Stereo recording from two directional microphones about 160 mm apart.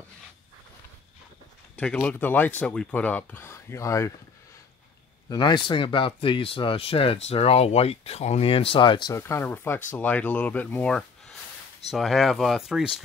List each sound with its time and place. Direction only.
1.8 s speech: 10° left (ahead or behind)
5.3 s speech: 25° left (ahead or behind)
9.1 s speech: 15° left (ahead or behind); by 12.8 s centre (ahead or behind)